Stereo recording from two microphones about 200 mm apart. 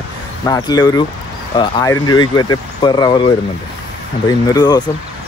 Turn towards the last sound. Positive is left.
turn(degrees=20)  # may be behind; listen again after turning